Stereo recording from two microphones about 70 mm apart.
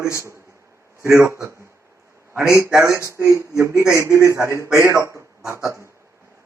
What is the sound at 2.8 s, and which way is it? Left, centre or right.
A man's voice, right.